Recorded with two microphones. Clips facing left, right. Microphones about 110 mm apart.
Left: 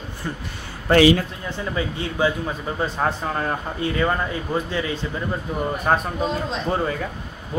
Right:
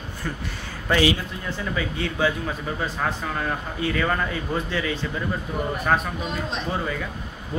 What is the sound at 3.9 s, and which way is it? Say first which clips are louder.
Speech: left 3 dB; 20° left (ahead or behind).